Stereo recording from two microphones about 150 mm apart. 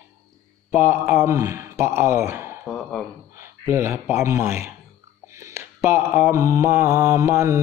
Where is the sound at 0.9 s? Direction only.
15° right (ahead or behind).